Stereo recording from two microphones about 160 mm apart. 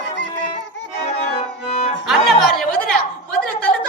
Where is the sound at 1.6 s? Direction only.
45° left (ahead or behind).